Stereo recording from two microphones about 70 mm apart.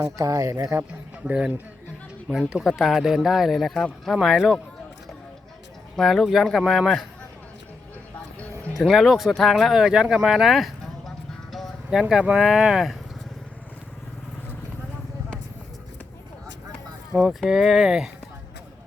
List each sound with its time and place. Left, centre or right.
0.0 s speech: right
1.3 s a man's voice: right; by 4.6 s centre
6.0 s speech: centre
8.8 s speech: centre
17.2 s speech: centre